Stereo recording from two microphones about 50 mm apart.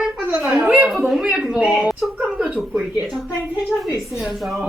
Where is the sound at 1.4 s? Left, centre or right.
Right.